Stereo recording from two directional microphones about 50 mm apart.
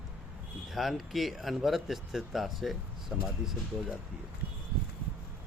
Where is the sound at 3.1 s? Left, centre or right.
Right.